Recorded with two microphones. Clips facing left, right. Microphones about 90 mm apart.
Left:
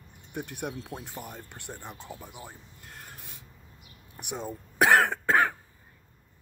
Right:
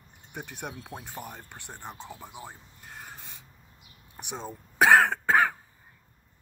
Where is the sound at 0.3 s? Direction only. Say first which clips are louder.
Left 3 dB; 20° right (ahead or behind).